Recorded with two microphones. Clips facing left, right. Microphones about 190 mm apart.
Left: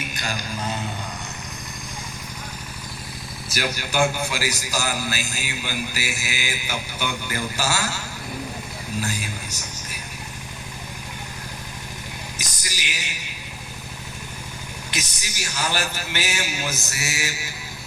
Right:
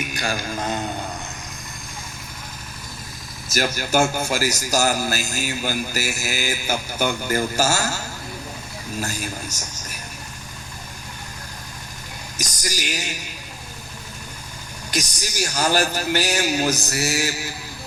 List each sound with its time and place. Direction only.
0.1 s a sound: 45° right (ahead or behind)
3.5 s a man's voice: 45° right (ahead or behind)
12.4 s speech: 45° right (ahead or behind)
14.8 s a man's voice: 40° right (ahead or behind)